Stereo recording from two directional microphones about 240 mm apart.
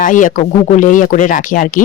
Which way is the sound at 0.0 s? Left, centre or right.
Left.